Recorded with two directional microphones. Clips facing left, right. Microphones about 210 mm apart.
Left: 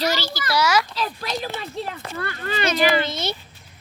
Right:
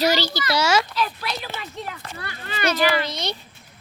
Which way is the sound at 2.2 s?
50° left (ahead or behind).